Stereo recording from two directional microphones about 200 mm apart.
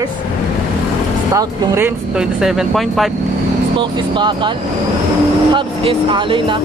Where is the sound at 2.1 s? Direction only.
Centre (ahead or behind).